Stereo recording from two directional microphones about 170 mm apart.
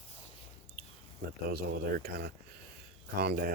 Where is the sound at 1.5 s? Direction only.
65° right (ahead or behind).